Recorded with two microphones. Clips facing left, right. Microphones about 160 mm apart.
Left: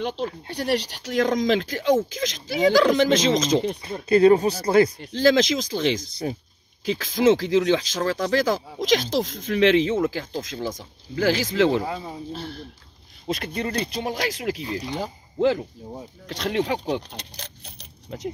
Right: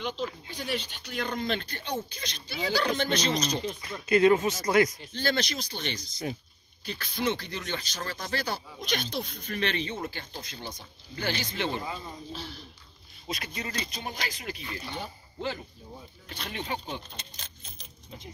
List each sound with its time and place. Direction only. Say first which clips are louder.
0.5 s speech: left 9 dB; 75° left (ahead or behind); by 3.7 s 90° left
3.8 s speech: left 4 dB; 30° left (ahead or behind)
5.0 s speech: left 11 dB; 90° left
15.9 s speech: left 9 dB; 75° left (ahead or behind)